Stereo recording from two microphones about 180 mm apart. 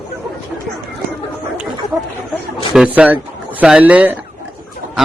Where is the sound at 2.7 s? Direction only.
10° right (ahead or behind).